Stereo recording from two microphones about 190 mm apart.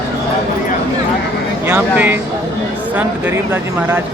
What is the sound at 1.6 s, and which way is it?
Speech, 10° right (ahead or behind).